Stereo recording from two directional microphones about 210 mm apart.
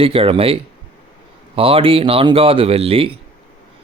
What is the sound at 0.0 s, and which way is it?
Speech, 25° right (ahead or behind).